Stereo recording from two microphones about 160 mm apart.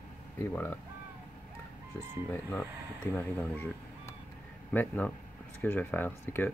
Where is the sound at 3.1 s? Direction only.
15° left (ahead or behind).